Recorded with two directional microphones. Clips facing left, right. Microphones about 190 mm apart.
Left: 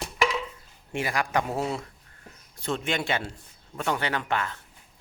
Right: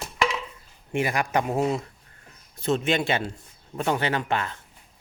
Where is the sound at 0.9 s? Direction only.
20° right (ahead or behind).